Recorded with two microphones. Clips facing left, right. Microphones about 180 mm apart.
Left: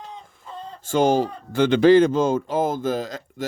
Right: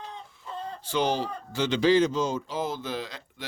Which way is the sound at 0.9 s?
45° left (ahead or behind).